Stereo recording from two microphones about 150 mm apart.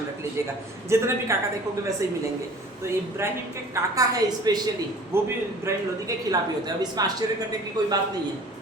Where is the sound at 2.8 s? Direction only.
15° right (ahead or behind).